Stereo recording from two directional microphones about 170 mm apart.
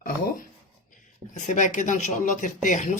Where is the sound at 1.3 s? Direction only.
45° left (ahead or behind).